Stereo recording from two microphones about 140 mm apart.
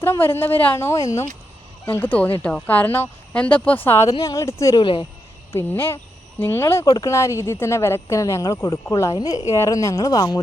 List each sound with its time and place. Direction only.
0.0 s speech: 15° left (ahead or behind)
1.8 s speech: 15° left (ahead or behind)
4.8 s speech: 35° left (ahead or behind)
5.5 s speech: 15° left (ahead or behind)